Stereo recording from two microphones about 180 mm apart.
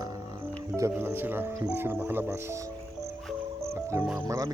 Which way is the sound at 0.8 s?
15° right (ahead or behind).